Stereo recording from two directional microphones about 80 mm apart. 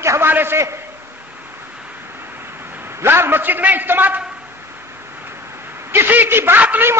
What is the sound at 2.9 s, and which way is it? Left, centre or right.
A man's voice, right.